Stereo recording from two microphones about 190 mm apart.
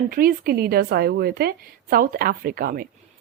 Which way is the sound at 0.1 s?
50° right (ahead or behind).